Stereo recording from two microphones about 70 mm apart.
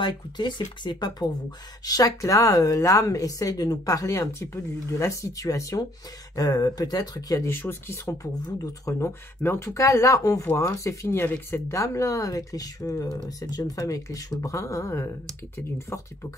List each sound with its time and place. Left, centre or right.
0.0 s speech: left
1.9 s speech: left
6.3 s speech: left
7.4 s speech: left
8.0 s speech: left
9.4 s speech: left
9.8 s speech: left
11.2 s speech: left
11.7 s speech: left
13.4 s speech: left
13.7 s speech: left